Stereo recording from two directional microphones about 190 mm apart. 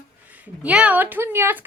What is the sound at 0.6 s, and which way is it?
Speech, 5° right (ahead or behind).